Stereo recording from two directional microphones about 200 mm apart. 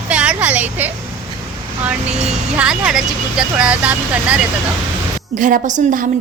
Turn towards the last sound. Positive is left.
turn(degrees=-40)  # may be behind; listen again after turning